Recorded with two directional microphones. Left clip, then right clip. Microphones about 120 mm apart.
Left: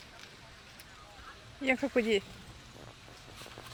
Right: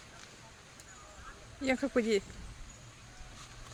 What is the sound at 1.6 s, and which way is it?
Speech, 5° right (ahead or behind).